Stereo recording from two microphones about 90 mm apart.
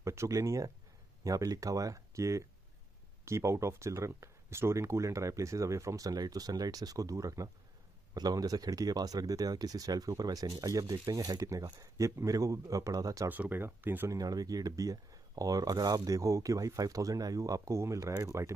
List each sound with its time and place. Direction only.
0.0 s speech: 30° right (ahead or behind)
13.3 s speech: 20° right (ahead or behind)
14.1 s speech: 45° right (ahead or behind)